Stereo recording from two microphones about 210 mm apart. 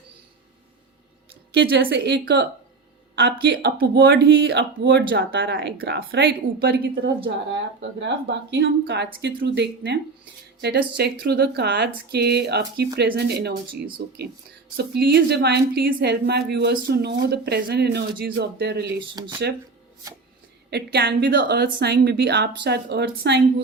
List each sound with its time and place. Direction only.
1.5 s a woman's voice: 55° right (ahead or behind)
7.8 s a woman's voice: 60° right (ahead or behind)
19.1 s speech: 20° right (ahead or behind)
20.7 s a woman's voice: 50° right (ahead or behind)